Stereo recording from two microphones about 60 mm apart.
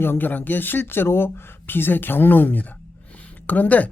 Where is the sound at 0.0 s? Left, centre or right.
Left.